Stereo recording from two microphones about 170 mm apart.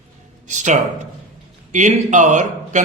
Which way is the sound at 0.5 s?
45° right (ahead or behind).